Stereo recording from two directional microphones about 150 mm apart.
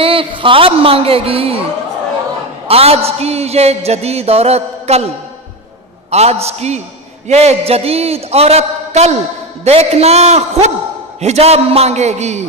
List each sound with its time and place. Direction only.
0.0 s a man's voice: 35° right (ahead or behind)
2.7 s a man's voice: 40° right (ahead or behind)